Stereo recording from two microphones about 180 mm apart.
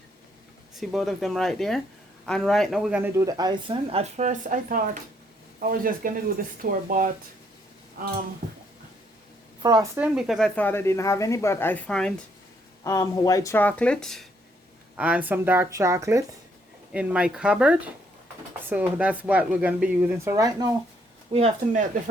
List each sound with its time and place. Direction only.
0.8 s speech: centre (ahead or behind); by 7.1 s 50° right (ahead or behind)
9.6 s speech: 20° right (ahead or behind)
10.0 s speech: 5° right (ahead or behind)
12.8 s speech: 20° left (ahead or behind); by 14.3 s centre (ahead or behind)
14.9 s speech: 10° right (ahead or behind)
16.9 s speech: 5° right (ahead or behind)
21.3 s speech: 40° right (ahead or behind)